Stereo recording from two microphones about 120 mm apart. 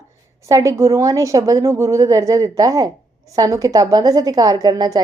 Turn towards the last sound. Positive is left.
turn(degrees=-35)  # may be behind; listen again after turning